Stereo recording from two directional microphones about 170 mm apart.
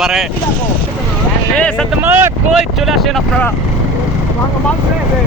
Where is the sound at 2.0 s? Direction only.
10° right (ahead or behind).